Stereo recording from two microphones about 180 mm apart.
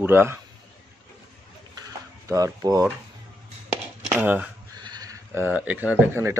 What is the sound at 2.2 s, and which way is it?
Speech, 20° right (ahead or behind).